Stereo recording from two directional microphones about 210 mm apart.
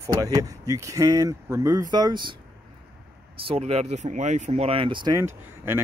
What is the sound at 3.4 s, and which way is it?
Speech, 30° right (ahead or behind).